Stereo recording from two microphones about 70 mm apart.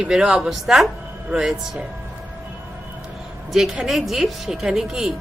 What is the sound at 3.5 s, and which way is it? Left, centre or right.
A woman's voice, centre.